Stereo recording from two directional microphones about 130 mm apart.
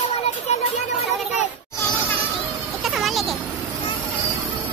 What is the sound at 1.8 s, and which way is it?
Music, 15° left (ahead or behind).